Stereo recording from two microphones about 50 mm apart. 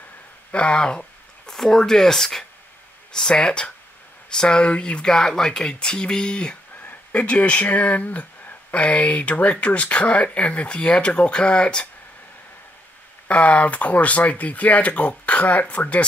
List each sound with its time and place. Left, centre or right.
0.5 s speech: left
6.9 s speech: left
13.3 s speech: left